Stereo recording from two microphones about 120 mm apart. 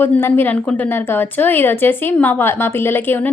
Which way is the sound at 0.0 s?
20° left (ahead or behind).